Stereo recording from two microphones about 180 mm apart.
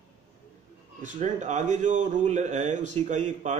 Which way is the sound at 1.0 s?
40° right (ahead or behind).